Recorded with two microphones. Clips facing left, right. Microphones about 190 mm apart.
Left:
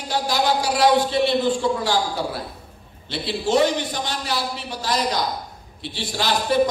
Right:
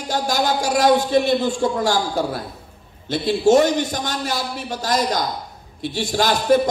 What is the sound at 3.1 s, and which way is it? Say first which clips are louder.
A man's voice: right 6 dB; 45° right (ahead or behind).